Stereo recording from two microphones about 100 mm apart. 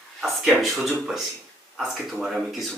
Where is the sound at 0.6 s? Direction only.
5° right (ahead or behind).